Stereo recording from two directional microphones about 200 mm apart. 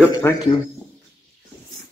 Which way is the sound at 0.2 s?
10° left (ahead or behind).